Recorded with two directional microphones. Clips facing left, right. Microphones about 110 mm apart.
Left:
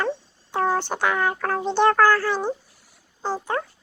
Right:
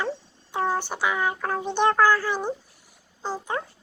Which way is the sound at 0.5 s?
45° left (ahead or behind).